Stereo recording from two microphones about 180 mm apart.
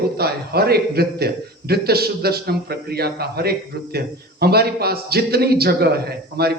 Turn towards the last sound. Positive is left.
turn(degrees=-60)  # may be behind; listen again after turning